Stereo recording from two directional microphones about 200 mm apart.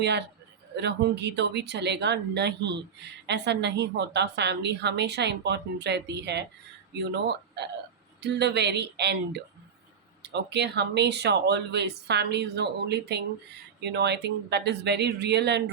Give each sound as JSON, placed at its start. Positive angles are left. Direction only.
{"t": 0.0, "sound": "a woman's voice", "side_deg": -60}